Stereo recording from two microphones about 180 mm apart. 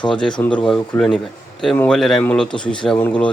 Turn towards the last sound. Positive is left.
turn(degrees=5)  # may be behind; listen again after turning